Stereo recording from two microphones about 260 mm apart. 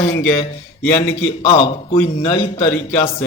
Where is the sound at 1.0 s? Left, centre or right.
Left.